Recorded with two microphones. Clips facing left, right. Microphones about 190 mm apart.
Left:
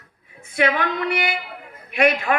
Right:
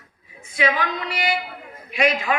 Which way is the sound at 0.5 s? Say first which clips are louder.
Left 2 dB; 55° left (ahead or behind).